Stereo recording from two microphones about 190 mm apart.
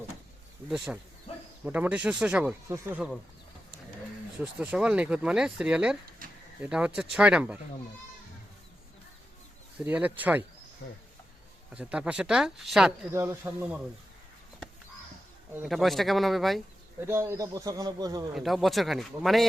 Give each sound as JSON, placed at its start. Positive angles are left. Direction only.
{"t": 0.9, "sound": "speech", "side_deg": -5}
{"t": 4.4, "sound": "speech", "side_deg": -5}
{"t": 6.2, "sound": "a sound", "side_deg": -50}
{"t": 6.6, "sound": "speech", "side_deg": -5}
{"t": 9.8, "sound": "speech", "side_deg": -10}
{"t": 10.8, "sound": "speech", "side_deg": 55}
{"t": 11.7, "sound": "speech", "side_deg": -5}
{"t": 13.1, "sound": "speech", "side_deg": -15}
{"t": 15.5, "sound": "speech", "side_deg": 0}
{"t": 17.0, "sound": "speech", "side_deg": -15}
{"t": 18.3, "sound": "speech", "side_deg": 0}